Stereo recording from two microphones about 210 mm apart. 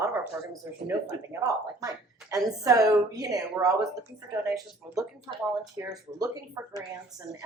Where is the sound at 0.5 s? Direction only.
15° right (ahead or behind).